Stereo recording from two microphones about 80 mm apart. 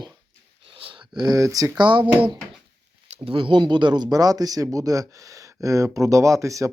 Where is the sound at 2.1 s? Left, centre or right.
Centre.